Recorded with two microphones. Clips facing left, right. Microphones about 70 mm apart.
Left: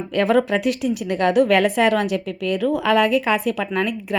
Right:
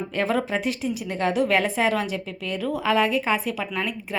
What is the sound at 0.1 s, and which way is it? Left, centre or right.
A woman's voice, left.